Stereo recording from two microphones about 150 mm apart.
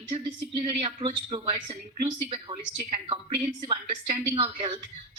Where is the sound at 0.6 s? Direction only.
35° right (ahead or behind).